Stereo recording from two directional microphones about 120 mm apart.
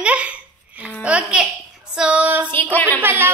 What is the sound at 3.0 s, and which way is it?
Speech, 20° right (ahead or behind).